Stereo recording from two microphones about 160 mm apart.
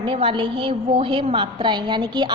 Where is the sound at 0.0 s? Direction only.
35° right (ahead or behind).